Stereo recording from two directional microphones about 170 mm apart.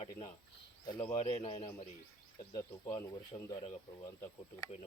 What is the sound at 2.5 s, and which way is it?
Speech, 20° left (ahead or behind).